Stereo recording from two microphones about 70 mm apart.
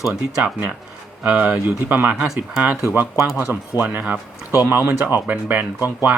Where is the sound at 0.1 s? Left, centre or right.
Right.